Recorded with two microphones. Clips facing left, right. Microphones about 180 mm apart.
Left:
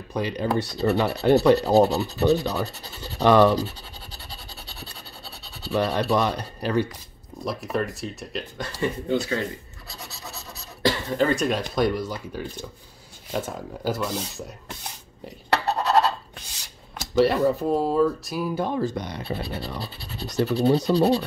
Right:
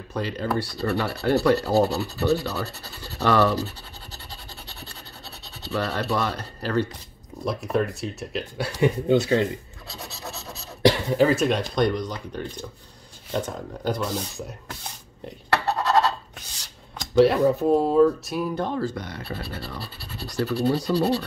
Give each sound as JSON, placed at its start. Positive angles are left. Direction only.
{"t": 0.1, "sound": "rub", "side_deg": 15}
{"t": 5.7, "sound": "speech", "side_deg": 15}
{"t": 7.4, "sound": "speech", "side_deg": 0}
{"t": 10.8, "sound": "speech", "side_deg": -15}
{"t": 11.1, "sound": "speech", "side_deg": 0}
{"t": 17.0, "sound": "speech", "side_deg": 0}